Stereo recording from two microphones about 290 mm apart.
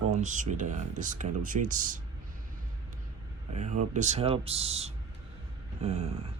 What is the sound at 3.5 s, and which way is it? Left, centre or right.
Speech, right.